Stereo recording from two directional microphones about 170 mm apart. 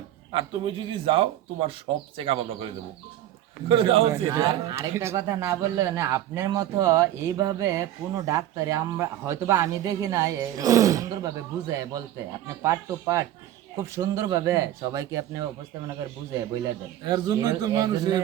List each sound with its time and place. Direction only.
0.3 s a man's voice: 30° right (ahead or behind)
3.7 s a man's voice: 35° right (ahead or behind)
4.1 s speech: 15° right (ahead or behind)
17.1 s speech: 20° right (ahead or behind)